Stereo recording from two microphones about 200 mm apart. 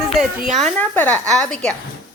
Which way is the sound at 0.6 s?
10° left (ahead or behind).